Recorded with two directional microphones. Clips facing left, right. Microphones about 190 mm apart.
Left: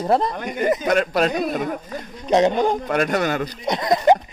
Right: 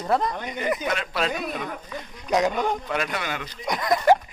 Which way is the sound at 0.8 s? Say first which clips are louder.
Left 8 dB; 45° left (ahead or behind).